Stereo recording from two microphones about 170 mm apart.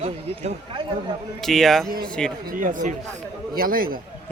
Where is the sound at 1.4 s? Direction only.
Centre (ahead or behind).